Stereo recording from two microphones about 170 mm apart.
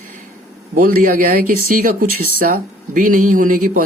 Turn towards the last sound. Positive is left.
turn(degrees=-50)  # may be behind; listen again after turning